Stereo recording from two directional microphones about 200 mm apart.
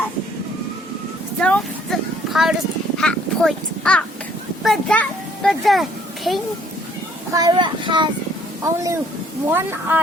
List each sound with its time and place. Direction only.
1.4 s a sound: 5° left (ahead or behind)
3.0 s a child's voice: 5° left (ahead or behind)
7.3 s speech: 20° right (ahead or behind)